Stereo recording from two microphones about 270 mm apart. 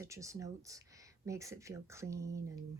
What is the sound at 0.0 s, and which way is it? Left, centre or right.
A woman's voice, centre.